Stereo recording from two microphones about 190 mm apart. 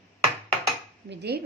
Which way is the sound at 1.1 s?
60° right (ahead or behind).